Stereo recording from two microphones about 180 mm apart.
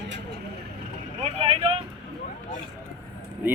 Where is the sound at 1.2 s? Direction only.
35° right (ahead or behind).